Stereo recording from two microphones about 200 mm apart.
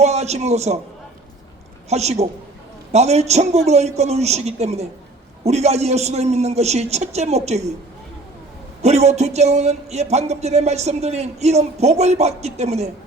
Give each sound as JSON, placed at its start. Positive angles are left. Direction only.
{"t": 0.0, "sound": "a man's voice", "side_deg": -35}
{"t": 1.9, "sound": "speech", "side_deg": -35}
{"t": 8.8, "sound": "speech", "side_deg": -35}